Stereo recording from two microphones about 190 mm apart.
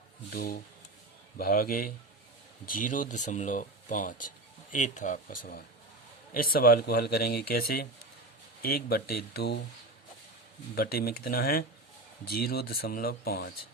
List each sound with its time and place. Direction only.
0.3 s speech: 50° left (ahead or behind)
10.8 s speech: 55° left (ahead or behind)